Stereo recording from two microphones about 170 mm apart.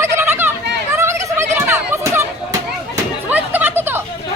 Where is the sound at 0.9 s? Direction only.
15° right (ahead or behind).